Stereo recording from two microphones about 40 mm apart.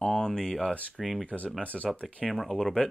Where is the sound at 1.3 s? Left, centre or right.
Left.